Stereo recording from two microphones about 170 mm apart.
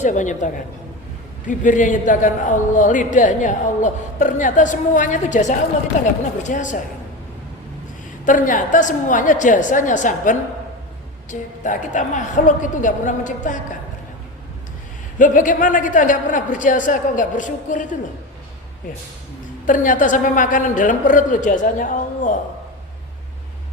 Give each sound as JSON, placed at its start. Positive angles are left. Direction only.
{"t": 0.0, "sound": "a man's voice", "side_deg": 45}
{"t": 8.2, "sound": "a man's voice", "side_deg": 50}
{"t": 15.2, "sound": "a man's voice", "side_deg": 50}
{"t": 19.6, "sound": "a man's voice", "side_deg": 50}